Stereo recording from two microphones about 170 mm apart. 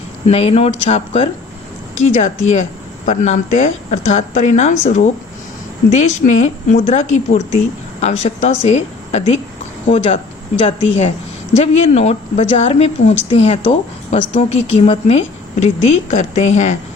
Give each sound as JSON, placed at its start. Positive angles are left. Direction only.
{"t": 0.3, "sound": "a woman's voice", "side_deg": 35}